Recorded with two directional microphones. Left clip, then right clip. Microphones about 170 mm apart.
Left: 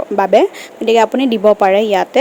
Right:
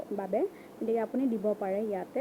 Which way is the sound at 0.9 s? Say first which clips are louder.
Left 19 dB; 75° left (ahead or behind).